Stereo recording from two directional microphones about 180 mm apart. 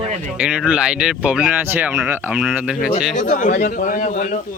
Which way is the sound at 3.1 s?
45° left (ahead or behind).